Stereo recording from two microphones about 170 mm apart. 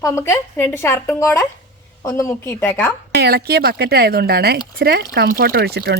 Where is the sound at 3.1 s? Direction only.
65° right (ahead or behind).